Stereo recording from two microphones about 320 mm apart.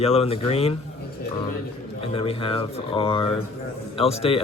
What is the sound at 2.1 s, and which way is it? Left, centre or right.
Speech, centre.